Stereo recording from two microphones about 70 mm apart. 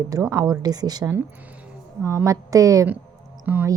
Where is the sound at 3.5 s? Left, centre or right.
Right.